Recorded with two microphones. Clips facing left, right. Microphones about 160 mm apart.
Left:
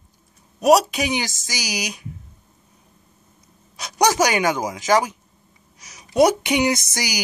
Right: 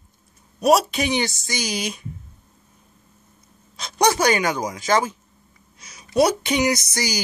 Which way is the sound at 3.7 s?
15° left (ahead or behind).